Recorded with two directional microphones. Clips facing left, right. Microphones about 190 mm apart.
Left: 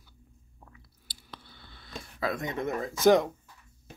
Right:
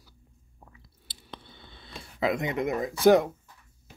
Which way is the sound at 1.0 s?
25° right (ahead or behind).